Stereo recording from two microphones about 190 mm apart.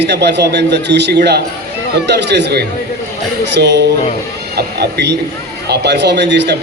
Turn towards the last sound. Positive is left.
turn(degrees=-65)  # may be behind; listen again after turning